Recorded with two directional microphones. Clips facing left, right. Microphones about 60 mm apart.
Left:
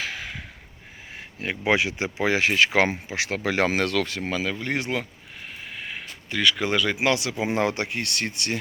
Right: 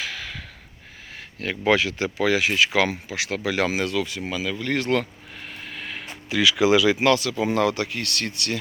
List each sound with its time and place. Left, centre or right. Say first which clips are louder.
0.0 s a sound: even; left
1.1 s speech: right 1 dB; left
4.9 s speech: right 6 dB; centre
5.6 s vehicle: right 1 dB; centre
6.3 s speech: right 5 dB; centre
7.0 s speech: right 3 dB; left